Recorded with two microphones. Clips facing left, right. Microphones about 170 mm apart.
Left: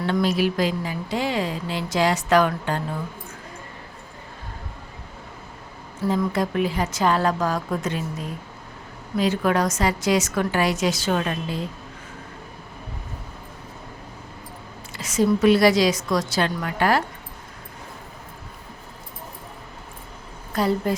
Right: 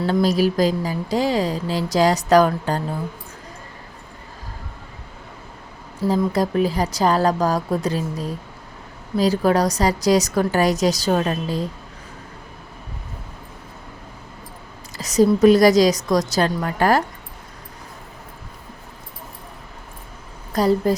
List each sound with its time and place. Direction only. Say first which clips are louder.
0.0 s speech: right 3 dB; 35° right (ahead or behind)
6.1 s speech: right 3 dB; 35° right (ahead or behind)
14.9 s speech: right 4 dB; 40° right (ahead or behind)
20.5 s speech: right 4 dB; 40° right (ahead or behind)